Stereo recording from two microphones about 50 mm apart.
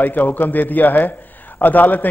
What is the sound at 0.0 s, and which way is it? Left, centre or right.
A man's voice, left.